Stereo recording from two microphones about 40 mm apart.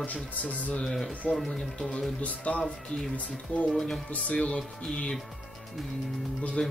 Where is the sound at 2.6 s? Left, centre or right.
Centre.